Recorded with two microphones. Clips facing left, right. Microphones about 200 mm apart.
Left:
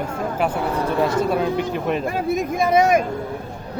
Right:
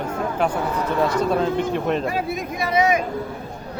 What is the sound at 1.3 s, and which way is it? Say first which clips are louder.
Speech: even; 10° left (ahead or behind).